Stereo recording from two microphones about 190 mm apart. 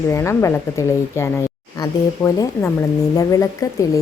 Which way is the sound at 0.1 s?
15° left (ahead or behind).